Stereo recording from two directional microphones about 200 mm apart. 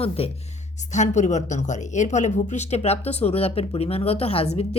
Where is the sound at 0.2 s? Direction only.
30° left (ahead or behind).